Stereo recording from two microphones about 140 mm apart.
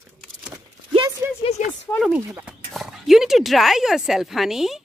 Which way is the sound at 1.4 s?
55° left (ahead or behind).